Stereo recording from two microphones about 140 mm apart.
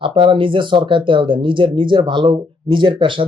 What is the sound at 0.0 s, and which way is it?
Speech, 40° right (ahead or behind).